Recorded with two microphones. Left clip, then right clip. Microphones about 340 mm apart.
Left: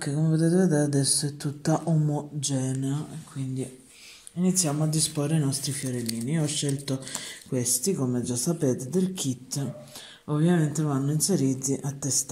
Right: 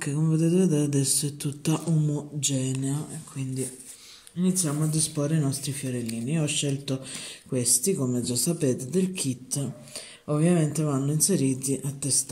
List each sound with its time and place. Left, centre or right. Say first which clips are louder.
0.0 s speech: even; centre
0.8 s speech: left 1 dB; centre
1.2 s speech: left 1 dB; centre
4.4 s speech: left 1 dB; centre